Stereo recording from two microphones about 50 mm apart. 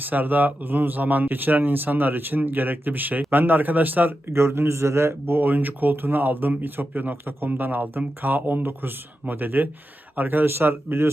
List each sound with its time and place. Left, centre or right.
0.0 s speech: right
4.3 s a man's voice: right
5.5 s speech: right